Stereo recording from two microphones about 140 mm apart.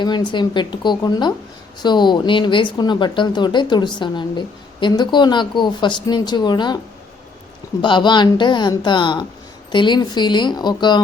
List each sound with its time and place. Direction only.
0.0 s speech: 30° left (ahead or behind)
7.8 s speech: 35° left (ahead or behind)